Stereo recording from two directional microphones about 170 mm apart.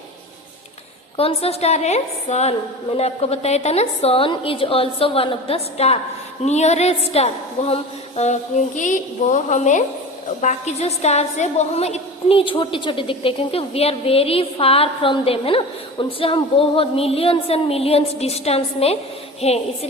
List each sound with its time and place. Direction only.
1.1 s a woman's voice: 35° left (ahead or behind)